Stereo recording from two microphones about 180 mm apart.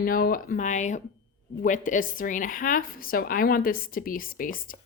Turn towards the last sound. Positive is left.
turn(degrees=50)  # may be behind; listen again after turning